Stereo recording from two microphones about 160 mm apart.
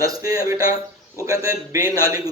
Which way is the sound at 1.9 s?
20° right (ahead or behind).